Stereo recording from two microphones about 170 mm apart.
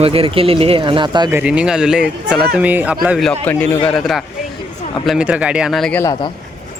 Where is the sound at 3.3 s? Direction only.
10° left (ahead or behind).